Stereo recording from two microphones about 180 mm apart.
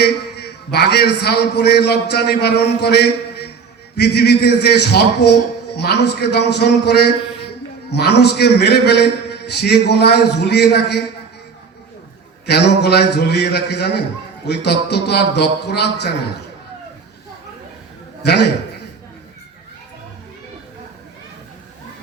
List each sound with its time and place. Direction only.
0.0 s a man's voice: 65° left (ahead or behind)
12.5 s a man's voice: 65° left (ahead or behind)
18.2 s a man's voice: 65° left (ahead or behind)